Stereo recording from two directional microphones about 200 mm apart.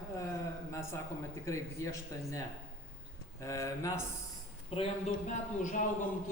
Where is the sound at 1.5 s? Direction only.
15° left (ahead or behind).